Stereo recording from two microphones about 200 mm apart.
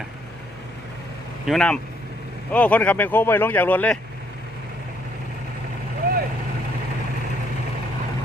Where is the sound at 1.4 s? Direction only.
5° left (ahead or behind).